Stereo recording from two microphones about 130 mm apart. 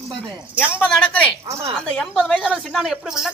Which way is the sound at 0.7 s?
10° left (ahead or behind).